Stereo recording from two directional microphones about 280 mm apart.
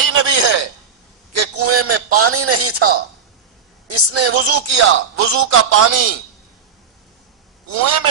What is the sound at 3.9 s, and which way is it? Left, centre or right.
Speech, right.